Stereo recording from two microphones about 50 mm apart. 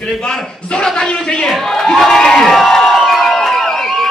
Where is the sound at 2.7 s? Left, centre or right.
Centre.